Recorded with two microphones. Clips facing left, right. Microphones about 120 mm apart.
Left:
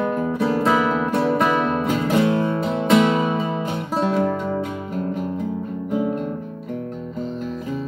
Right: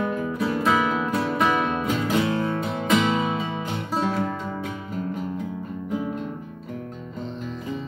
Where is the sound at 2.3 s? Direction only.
25° left (ahead or behind).